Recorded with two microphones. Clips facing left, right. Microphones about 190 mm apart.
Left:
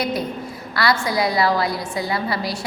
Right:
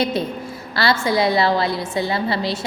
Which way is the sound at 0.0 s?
25° right (ahead or behind).